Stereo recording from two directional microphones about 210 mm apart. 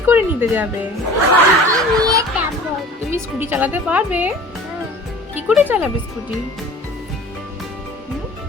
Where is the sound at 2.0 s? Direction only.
15° right (ahead or behind).